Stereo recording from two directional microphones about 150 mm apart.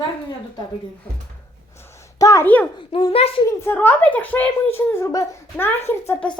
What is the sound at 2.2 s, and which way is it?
Speech, 20° left (ahead or behind).